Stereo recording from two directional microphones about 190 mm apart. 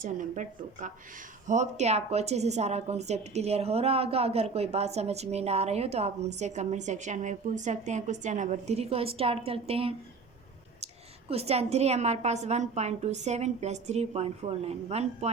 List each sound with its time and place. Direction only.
0.0 s a woman's voice: 45° right (ahead or behind)
11.3 s a woman's voice: 30° right (ahead or behind)